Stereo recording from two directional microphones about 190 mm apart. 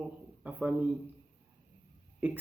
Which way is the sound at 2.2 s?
5° right (ahead or behind).